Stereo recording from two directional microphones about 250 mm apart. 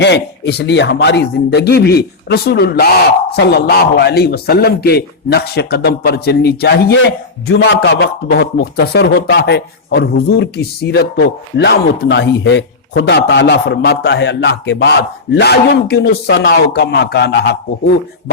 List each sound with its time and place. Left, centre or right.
0.0 s a man's voice: left